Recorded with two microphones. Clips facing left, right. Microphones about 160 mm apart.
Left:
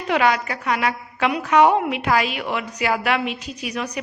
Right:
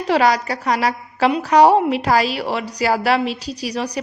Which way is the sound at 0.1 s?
35° right (ahead or behind).